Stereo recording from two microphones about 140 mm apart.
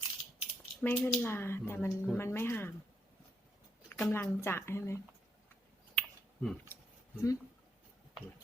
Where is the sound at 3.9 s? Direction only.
15° left (ahead or behind).